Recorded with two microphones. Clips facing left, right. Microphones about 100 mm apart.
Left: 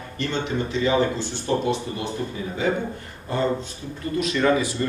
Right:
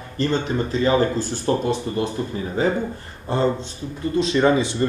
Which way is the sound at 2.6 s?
40° right (ahead or behind).